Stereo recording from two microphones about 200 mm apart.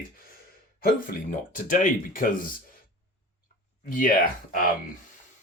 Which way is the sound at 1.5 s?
40° left (ahead or behind).